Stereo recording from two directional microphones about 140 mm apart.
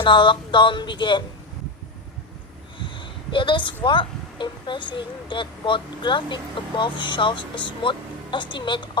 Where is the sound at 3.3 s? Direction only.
35° left (ahead or behind).